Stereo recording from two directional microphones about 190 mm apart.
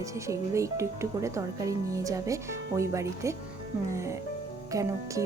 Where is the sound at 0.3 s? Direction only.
15° right (ahead or behind).